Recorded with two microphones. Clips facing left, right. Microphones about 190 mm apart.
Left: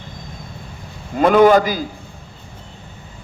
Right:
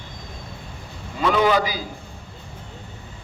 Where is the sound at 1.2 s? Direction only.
50° left (ahead or behind).